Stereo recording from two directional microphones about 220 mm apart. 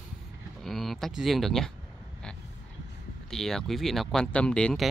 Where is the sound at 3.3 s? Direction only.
Centre (ahead or behind).